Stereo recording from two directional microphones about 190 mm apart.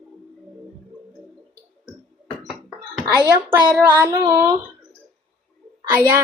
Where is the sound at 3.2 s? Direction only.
15° right (ahead or behind).